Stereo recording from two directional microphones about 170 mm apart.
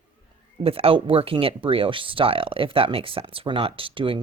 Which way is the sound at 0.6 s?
35° right (ahead or behind).